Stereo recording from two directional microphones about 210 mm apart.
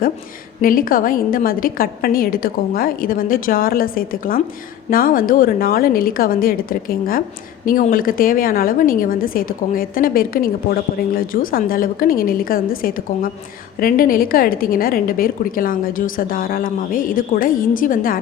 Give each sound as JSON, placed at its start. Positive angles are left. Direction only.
{"t": 0.6, "sound": "a woman's voice", "side_deg": 40}